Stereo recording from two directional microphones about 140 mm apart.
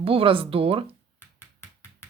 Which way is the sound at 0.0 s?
40° right (ahead or behind).